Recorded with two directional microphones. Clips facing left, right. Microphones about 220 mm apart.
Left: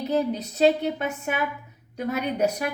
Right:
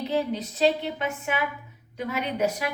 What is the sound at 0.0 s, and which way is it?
Speech, 40° left (ahead or behind).